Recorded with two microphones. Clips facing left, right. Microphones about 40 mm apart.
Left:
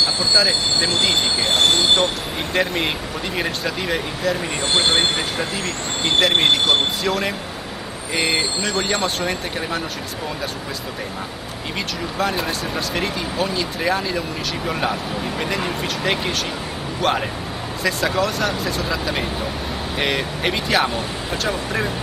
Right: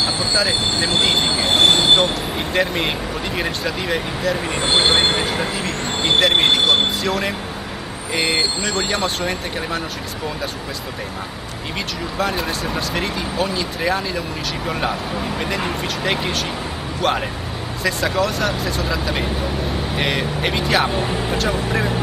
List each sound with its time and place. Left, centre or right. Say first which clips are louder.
0.0 s train wheels squealing: left 1 dB; centre
0.5 s speech: right 1 dB; centre
1.5 s train wheels squealing: right 3 dB; right
2.5 s speech: even; centre
4.6 s speech: right 3 dB; centre
12.2 s speech: even; centre